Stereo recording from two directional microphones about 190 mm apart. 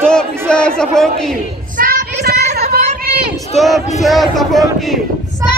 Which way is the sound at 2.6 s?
55° right (ahead or behind).